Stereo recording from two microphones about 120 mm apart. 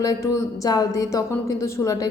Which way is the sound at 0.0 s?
30° left (ahead or behind).